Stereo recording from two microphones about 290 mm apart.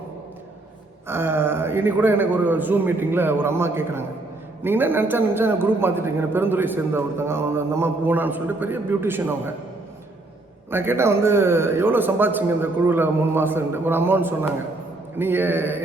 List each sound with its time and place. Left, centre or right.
1.0 s a man's voice: centre
10.7 s a man's voice: centre